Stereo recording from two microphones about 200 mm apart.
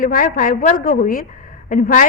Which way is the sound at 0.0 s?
45° left (ahead or behind).